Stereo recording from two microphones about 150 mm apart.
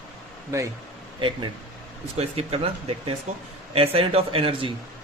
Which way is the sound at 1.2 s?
35° right (ahead or behind).